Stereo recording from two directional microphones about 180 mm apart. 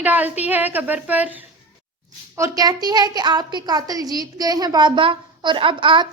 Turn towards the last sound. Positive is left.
turn(degrees=-25)  # may be behind; listen again after turning